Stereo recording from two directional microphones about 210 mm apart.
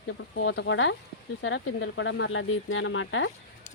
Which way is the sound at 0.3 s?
60° left (ahead or behind).